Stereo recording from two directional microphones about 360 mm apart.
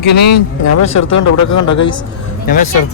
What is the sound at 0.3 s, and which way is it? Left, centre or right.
Speech, left.